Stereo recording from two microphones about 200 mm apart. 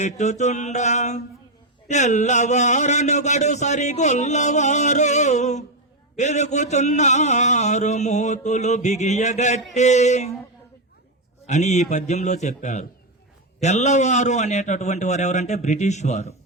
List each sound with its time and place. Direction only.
0.0 s speech: 35° left (ahead or behind)
11.4 s speech: 35° left (ahead or behind)